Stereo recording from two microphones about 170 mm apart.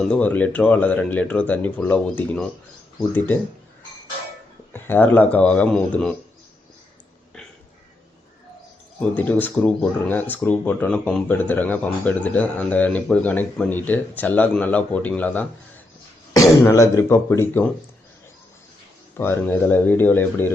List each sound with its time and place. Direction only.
0.1 s speech: 10° left (ahead or behind)
4.7 s speech: 10° left (ahead or behind)
9.0 s speech: 10° left (ahead or behind)
19.1 s speech: 15° left (ahead or behind)